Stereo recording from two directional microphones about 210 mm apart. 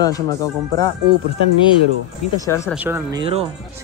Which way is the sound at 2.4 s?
15° left (ahead or behind).